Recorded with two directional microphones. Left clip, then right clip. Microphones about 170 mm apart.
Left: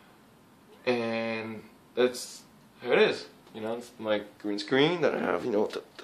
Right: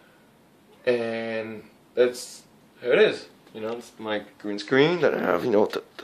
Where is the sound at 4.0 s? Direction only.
20° right (ahead or behind).